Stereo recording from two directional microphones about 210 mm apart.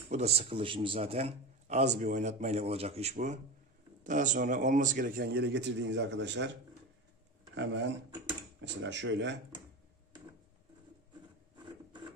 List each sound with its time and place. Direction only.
0.1 s a man's voice: 30° right (ahead or behind); by 6.5 s 55° right (ahead or behind)
7.5 s speech: 60° right (ahead or behind)